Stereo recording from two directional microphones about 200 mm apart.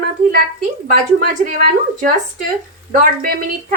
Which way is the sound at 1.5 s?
40° right (ahead or behind).